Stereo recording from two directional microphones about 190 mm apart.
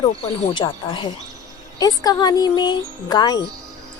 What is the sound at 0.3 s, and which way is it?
Speech, 25° left (ahead or behind).